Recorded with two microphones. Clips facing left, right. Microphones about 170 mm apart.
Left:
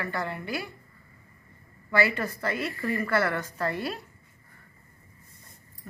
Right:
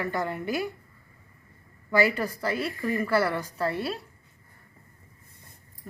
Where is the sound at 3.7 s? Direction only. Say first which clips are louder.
Right 1 dB; 30° right (ahead or behind).